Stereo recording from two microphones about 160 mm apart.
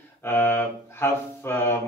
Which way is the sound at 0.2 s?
15° left (ahead or behind).